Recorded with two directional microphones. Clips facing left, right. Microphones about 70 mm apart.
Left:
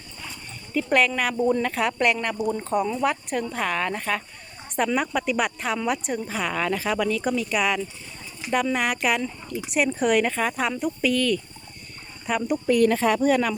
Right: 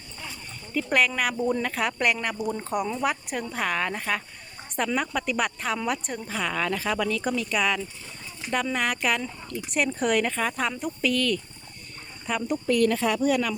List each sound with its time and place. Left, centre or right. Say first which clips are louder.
0.7 s speech: left 3 dB; centre
4.8 s a woman's voice: left 3 dB; centre
13.0 s speech: left 3 dB; left